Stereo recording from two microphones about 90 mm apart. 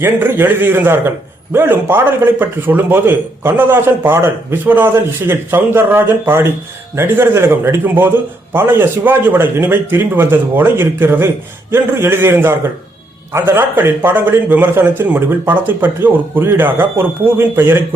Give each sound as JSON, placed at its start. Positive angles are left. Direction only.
{"t": 0.0, "sound": "a man's voice", "side_deg": -25}